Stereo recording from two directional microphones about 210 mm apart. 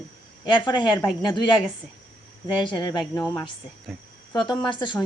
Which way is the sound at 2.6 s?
20° left (ahead or behind).